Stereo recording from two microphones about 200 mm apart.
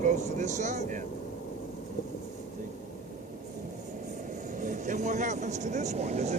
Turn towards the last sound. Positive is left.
turn(degrees=-35)  # may be behind; listen again after turning